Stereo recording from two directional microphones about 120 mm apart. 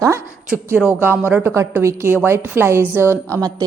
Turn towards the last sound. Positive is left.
turn(degrees=-20)  # may be behind; listen again after turning